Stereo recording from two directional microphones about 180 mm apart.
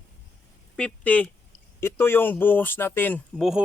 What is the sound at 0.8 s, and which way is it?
Speech, 5° left (ahead or behind).